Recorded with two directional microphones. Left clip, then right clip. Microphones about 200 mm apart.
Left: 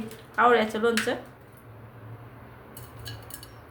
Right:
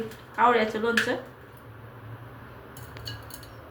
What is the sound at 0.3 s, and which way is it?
Speech, 35° left (ahead or behind).